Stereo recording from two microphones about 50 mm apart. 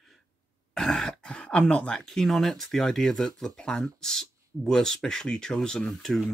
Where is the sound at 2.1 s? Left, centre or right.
Centre.